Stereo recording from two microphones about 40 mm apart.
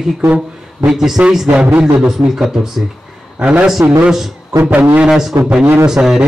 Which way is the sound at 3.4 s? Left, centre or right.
Right.